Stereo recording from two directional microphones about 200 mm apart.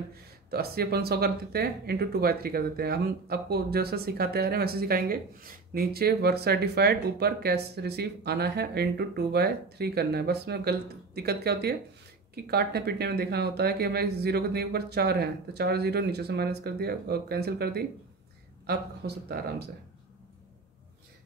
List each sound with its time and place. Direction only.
0.1 s speech: 50° right (ahead or behind)